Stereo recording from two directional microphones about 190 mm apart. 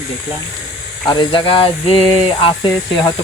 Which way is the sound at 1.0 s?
25° left (ahead or behind).